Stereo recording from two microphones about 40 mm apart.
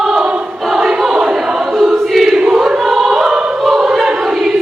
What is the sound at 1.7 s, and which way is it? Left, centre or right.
Choir, centre.